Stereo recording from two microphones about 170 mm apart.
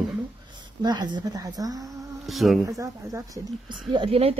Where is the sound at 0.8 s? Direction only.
25° right (ahead or behind).